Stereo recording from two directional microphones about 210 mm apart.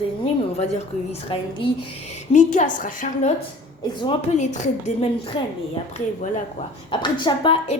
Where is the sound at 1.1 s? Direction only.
25° left (ahead or behind).